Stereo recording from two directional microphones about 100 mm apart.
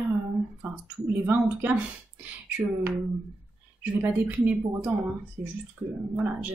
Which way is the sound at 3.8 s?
15° right (ahead or behind).